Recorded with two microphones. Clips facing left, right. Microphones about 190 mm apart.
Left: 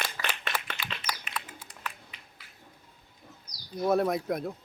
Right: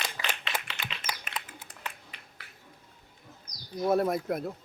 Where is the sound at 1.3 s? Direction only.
50° right (ahead or behind).